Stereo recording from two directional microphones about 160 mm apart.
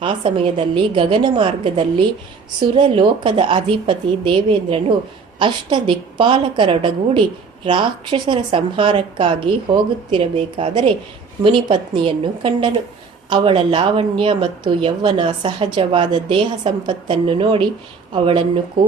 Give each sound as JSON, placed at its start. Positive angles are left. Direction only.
{"t": 0.0, "sound": "speech", "side_deg": -30}